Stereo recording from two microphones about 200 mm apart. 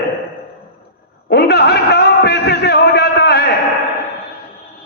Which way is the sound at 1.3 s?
55° left (ahead or behind).